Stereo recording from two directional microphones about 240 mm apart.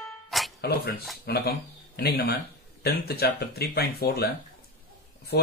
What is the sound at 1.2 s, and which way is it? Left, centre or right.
Speech, left.